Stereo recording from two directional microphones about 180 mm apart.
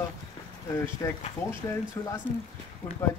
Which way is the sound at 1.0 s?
20° left (ahead or behind).